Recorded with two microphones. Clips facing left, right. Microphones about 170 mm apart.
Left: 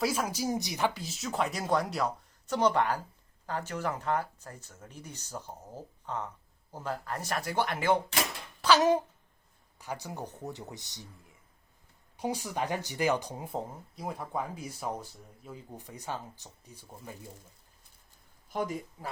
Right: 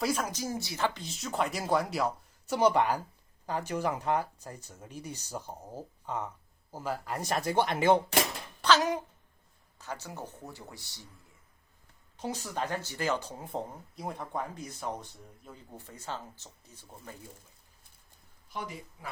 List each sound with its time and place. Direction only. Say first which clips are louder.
0.0 s speech: left 1 dB; 5° left (ahead or behind); by 7.9 s 20° right (ahead or behind)
8.6 s speech: left 1 dB; centre (ahead or behind)
9.7 s speech: left 2 dB; 15° left (ahead or behind)
12.1 s speech: left 2 dB; 15° left (ahead or behind)
13.9 s speech: left 1 dB; centre (ahead or behind)
18.4 s speech: left 7 dB; 45° left (ahead or behind)